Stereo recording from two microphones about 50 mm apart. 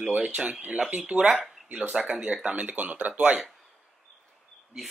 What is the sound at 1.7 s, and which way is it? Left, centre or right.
Speech, right.